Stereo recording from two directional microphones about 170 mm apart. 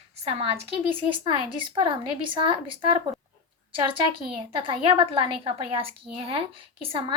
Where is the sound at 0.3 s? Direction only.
35° right (ahead or behind).